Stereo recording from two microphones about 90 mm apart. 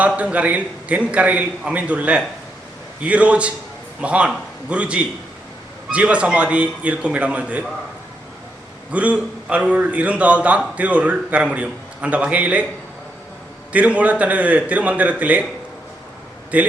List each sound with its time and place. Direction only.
0.0 s a man's voice: 15° right (ahead or behind)
8.9 s a man's voice: 15° right (ahead or behind)
13.7 s a man's voice: 15° right (ahead or behind)
16.5 s a man's voice: 15° right (ahead or behind)